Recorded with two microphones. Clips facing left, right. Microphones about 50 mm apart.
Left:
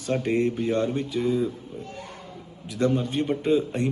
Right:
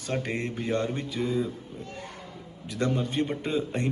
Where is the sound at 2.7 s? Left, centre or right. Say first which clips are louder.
Left 4 dB; right.